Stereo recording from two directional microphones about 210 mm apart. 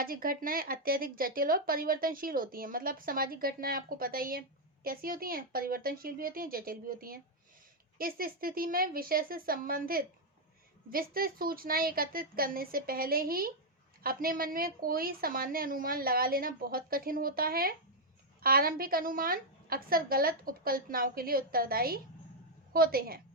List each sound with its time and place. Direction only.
0.0 s speech: 45° right (ahead or behind)